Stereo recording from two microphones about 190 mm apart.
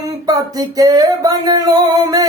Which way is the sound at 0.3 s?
20° right (ahead or behind).